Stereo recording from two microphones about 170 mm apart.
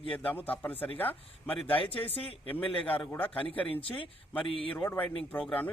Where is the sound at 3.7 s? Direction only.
35° left (ahead or behind).